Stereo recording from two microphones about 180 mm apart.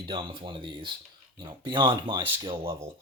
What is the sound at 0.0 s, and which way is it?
Speech, 25° right (ahead or behind).